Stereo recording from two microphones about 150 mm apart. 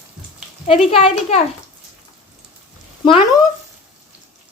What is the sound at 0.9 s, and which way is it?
Speech, 40° left (ahead or behind).